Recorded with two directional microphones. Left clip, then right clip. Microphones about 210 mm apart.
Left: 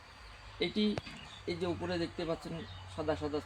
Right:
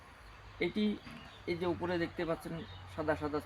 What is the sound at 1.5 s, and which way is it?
Speech, 15° left (ahead or behind).